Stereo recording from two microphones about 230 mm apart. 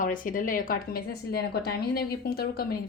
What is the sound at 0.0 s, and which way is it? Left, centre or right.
Speech, left.